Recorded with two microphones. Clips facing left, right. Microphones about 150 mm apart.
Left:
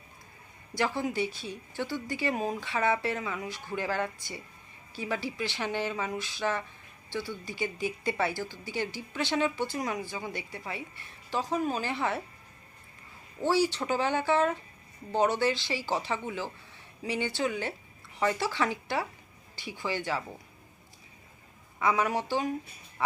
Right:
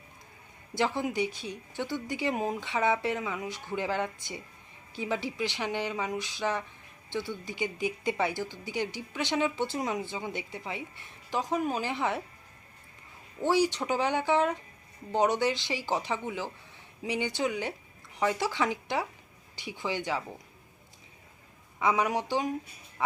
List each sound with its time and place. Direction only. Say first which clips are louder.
0.7 s speech: right 1 dB; 20° right (ahead or behind)
13.4 s speech: right 1 dB; 15° right (ahead or behind)
21.8 s speech: even; 20° right (ahead or behind)